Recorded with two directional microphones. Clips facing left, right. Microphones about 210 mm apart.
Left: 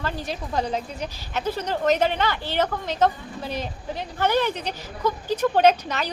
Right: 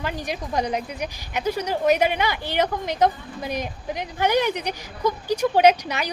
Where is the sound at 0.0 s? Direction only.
15° right (ahead or behind).